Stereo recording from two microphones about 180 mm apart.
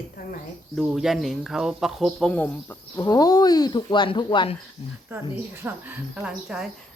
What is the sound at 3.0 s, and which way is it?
Speech, 20° left (ahead or behind).